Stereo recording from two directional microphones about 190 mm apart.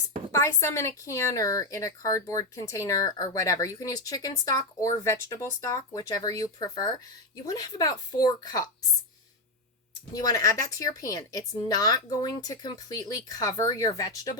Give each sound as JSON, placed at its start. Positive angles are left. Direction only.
{"t": 0.3, "sound": "a woman's voice", "side_deg": 15}
{"t": 10.2, "sound": "speech", "side_deg": 20}